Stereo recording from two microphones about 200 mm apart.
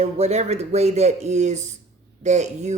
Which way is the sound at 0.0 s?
35° right (ahead or behind).